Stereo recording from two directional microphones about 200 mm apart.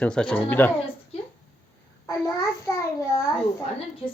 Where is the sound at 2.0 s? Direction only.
15° left (ahead or behind).